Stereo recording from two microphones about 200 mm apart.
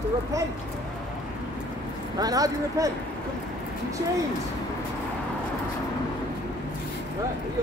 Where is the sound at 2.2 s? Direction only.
20° right (ahead or behind).